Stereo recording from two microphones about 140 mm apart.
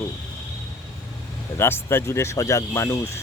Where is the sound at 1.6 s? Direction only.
15° left (ahead or behind).